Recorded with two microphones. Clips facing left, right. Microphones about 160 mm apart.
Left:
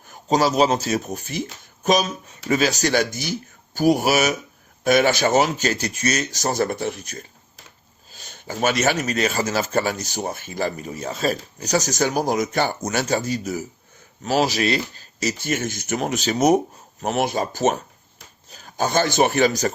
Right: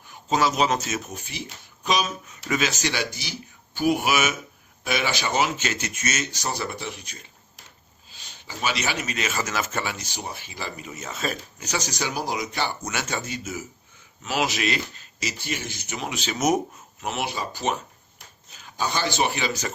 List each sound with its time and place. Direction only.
0.0 s speech: 40° left (ahead or behind)